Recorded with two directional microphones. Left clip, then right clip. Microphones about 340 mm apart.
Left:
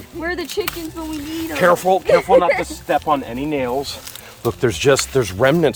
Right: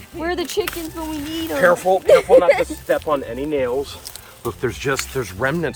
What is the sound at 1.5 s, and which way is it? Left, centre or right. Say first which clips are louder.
Speech: left 1 dB; left.